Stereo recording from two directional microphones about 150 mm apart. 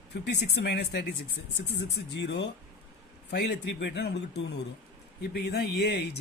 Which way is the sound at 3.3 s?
90° left.